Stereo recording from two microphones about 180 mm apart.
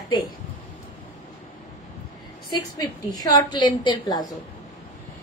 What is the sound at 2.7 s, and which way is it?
A woman's voice, 20° left (ahead or behind).